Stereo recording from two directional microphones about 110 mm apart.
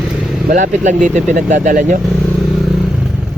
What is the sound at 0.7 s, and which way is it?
Speech, 90° right.